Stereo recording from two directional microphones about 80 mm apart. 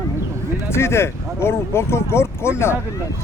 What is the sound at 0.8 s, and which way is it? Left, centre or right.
Speech, left.